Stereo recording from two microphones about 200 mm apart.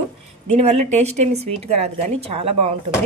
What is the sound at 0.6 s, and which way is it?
Speech, 35° right (ahead or behind).